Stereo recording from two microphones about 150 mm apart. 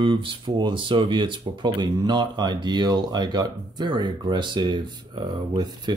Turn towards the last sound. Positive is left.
turn(degrees=-30)  # may be behind; listen again after turning